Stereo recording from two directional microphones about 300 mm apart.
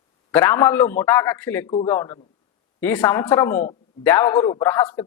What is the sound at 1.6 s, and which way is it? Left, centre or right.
Speech, centre.